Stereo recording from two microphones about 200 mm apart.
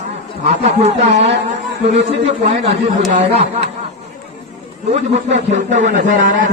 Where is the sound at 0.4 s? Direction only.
30° right (ahead or behind).